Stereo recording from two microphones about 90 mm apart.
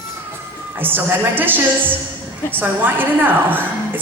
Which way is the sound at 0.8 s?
25° right (ahead or behind).